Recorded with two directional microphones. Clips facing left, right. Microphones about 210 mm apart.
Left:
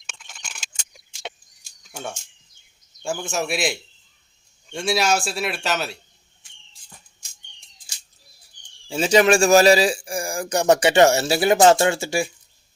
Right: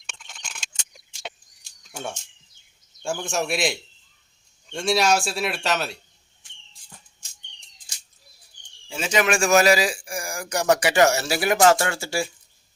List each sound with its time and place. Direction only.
0.1 s a sound: centre (ahead or behind)
3.0 s a man's voice: centre (ahead or behind)
8.9 s speech: 35° left (ahead or behind)